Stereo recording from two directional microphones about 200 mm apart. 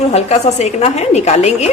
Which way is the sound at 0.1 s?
35° left (ahead or behind).